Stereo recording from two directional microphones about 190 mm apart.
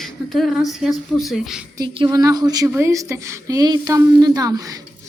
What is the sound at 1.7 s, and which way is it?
A woman's voice, 25° right (ahead or behind).